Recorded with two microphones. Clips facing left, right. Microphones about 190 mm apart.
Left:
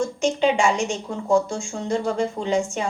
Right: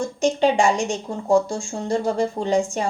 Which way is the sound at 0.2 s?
35° right (ahead or behind).